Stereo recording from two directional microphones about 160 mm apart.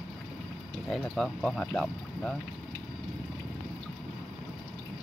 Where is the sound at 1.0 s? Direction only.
5° left (ahead or behind).